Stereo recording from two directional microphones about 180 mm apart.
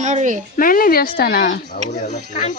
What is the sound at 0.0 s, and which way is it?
Speech, 40° right (ahead or behind).